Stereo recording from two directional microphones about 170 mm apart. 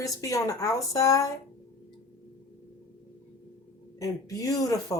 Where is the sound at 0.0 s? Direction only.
20° left (ahead or behind).